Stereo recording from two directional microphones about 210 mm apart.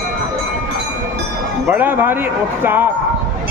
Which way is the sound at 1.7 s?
10° right (ahead or behind).